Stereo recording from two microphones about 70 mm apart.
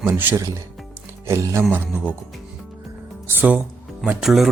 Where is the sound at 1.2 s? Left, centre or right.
Right.